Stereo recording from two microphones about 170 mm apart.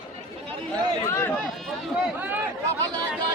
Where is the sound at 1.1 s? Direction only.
15° left (ahead or behind).